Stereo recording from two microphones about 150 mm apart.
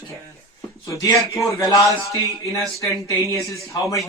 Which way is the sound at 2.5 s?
20° left (ahead or behind).